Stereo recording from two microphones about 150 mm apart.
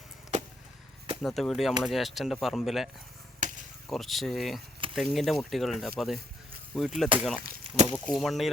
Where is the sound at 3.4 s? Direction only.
60° right (ahead or behind).